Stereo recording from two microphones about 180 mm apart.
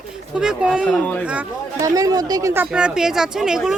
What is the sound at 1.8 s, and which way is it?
Speech, 20° right (ahead or behind).